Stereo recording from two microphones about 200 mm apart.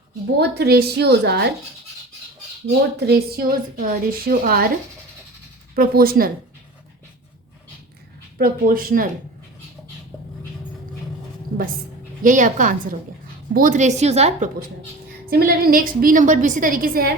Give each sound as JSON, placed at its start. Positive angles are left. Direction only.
{"t": 0.3, "sound": "a woman's voice", "side_deg": -55}
{"t": 3.0, "sound": "a woman's voice", "side_deg": -50}
{"t": 5.7, "sound": "a woman's voice", "side_deg": -45}
{"t": 8.4, "sound": "a woman's voice", "side_deg": -45}
{"t": 12.2, "sound": "a woman's voice", "side_deg": -40}
{"t": 15.3, "sound": "a woman's voice", "side_deg": -50}